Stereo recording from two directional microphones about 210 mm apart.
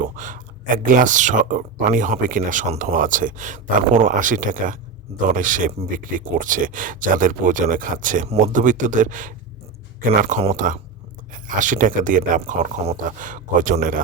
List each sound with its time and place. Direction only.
0.2 s speech: 40° right (ahead or behind)